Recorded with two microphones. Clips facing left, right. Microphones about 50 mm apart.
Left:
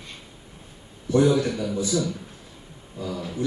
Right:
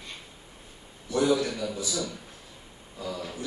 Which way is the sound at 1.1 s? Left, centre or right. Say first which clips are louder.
Left 5 dB; left.